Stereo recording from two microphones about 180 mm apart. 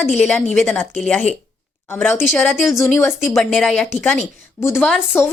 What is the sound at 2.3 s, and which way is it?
Speech, 5° left (ahead or behind).